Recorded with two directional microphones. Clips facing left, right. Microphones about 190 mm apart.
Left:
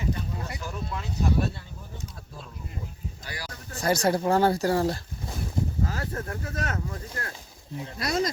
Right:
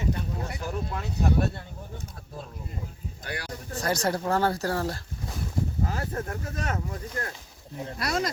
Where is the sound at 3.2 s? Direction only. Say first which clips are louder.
Right 5 dB; 60° right (ahead or behind).